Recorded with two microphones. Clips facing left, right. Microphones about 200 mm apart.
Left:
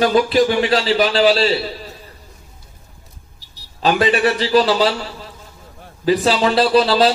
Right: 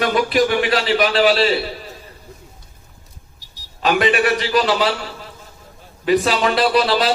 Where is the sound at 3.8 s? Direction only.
30° left (ahead or behind).